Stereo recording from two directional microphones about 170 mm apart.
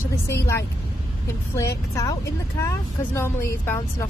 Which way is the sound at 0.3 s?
15° left (ahead or behind).